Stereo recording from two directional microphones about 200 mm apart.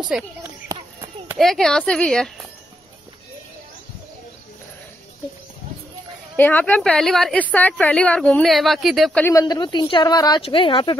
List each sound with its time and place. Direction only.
0.1 s speech: 5° right (ahead or behind)
0.7 s a sound: 15° right (ahead or behind)
1.4 s speech: centre (ahead or behind)
6.3 s a woman's voice: 10° left (ahead or behind); by 11.0 s 25° left (ahead or behind)